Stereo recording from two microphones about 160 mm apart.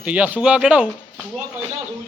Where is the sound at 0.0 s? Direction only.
10° right (ahead or behind).